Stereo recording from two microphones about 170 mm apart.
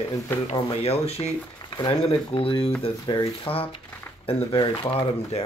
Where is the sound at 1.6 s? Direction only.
25° left (ahead or behind).